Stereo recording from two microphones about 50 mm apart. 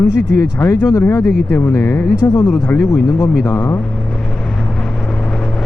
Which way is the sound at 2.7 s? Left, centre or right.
Left.